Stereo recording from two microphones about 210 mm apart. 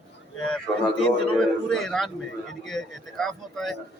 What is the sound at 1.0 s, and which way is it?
Speech, centre (ahead or behind).